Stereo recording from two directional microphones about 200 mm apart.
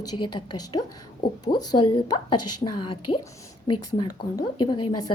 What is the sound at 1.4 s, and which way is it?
Speech, 20° left (ahead or behind).